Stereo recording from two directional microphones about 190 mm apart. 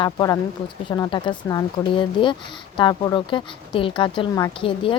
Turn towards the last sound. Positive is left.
turn(degrees=25)  # may be behind; listen again after turning